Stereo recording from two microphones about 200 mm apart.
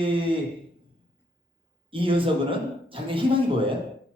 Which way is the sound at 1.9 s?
25° right (ahead or behind).